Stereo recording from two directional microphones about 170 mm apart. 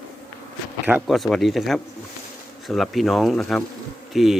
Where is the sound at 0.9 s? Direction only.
5° right (ahead or behind).